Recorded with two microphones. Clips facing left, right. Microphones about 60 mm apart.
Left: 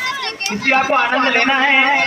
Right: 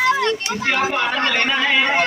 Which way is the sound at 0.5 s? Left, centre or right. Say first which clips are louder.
Left 5 dB; left.